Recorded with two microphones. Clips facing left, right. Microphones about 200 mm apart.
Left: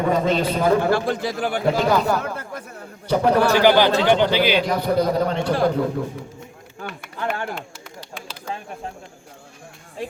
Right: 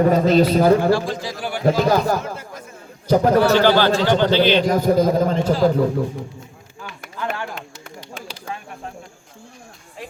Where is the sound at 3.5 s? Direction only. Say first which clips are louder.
Even; 15° left (ahead or behind).